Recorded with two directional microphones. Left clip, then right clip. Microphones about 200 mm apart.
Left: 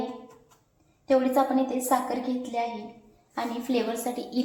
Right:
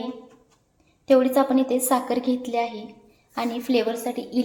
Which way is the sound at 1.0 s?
60° right (ahead or behind).